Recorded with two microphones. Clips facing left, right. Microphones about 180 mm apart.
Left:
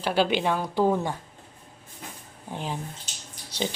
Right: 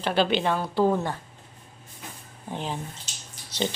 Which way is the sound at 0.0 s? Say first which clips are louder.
Even; 10° left (ahead or behind).